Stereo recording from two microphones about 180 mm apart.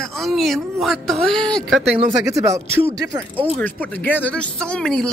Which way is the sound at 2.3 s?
15° right (ahead or behind).